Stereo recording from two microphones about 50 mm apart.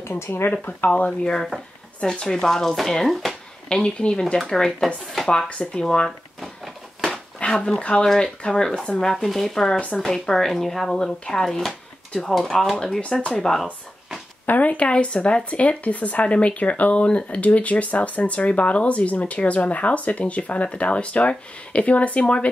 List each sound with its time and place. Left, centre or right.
0.8 s speech: left; by 3.3 s centre
3.6 s speech: centre
6.4 s a sound: centre
7.3 s speech: centre
9.8 s speech: left
10.0 s speech: centre
13.2 s speech: centre
14.4 s speech: left